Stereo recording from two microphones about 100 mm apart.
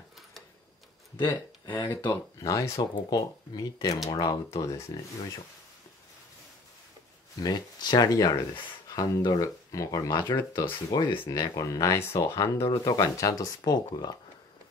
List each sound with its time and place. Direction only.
1.1 s speech: 20° left (ahead or behind)
2.5 s speech: 30° left (ahead or behind)
2.8 s speech: 45° left (ahead or behind)
7.4 s speech: 45° left (ahead or behind)
10.2 s speech: 50° left (ahead or behind)
11.2 s speech: 40° left (ahead or behind)